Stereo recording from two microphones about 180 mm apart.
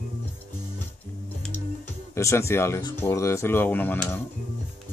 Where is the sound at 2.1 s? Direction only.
15° left (ahead or behind).